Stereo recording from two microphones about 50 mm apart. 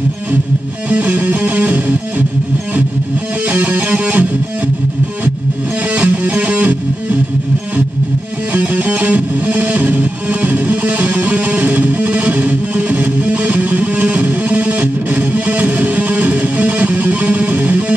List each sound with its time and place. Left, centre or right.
0.8 s music: right
3.4 s music: right
5.9 s music: right
8.5 s music: right